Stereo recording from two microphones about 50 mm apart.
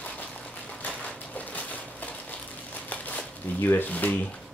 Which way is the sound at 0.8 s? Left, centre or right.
Left.